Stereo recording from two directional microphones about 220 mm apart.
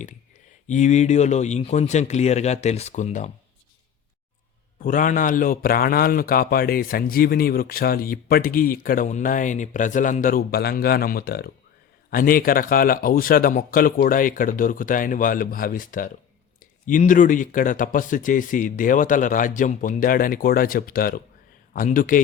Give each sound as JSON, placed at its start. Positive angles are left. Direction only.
{"t": 0.7, "sound": "a man's voice", "side_deg": 30}
{"t": 4.8, "sound": "a man's voice", "side_deg": 40}